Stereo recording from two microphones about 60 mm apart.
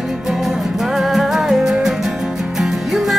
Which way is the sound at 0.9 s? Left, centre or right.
Centre.